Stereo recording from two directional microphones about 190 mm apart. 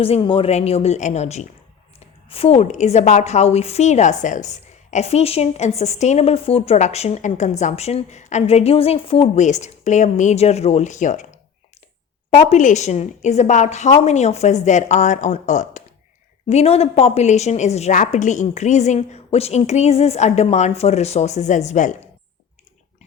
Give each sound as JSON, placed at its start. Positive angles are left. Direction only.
{"t": 0.0, "sound": "a woman's voice", "side_deg": 30}
{"t": 12.4, "sound": "a woman's voice", "side_deg": 40}